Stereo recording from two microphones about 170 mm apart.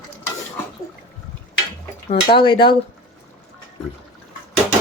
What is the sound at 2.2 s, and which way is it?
Speech, 30° left (ahead or behind).